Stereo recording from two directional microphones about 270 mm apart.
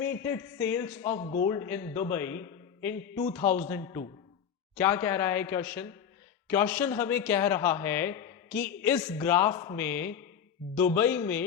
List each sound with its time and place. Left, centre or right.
0.0 s a man's voice: centre
1.2 s a man's voice: left
1.5 s a man's voice: centre